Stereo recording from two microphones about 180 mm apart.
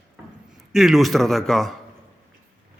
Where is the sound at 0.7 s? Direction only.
Centre (ahead or behind).